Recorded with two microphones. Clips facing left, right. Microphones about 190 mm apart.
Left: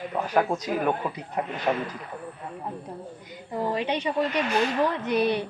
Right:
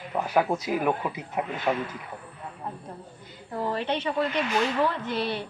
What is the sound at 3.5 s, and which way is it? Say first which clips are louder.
A woman's voice: left 1 dB; 15° left (ahead or behind).